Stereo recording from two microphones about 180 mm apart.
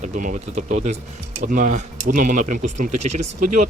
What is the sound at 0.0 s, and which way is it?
Speech, 45° right (ahead or behind).